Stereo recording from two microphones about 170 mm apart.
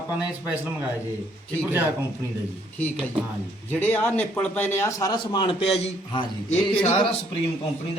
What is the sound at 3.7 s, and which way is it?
A man's voice, 10° left (ahead or behind).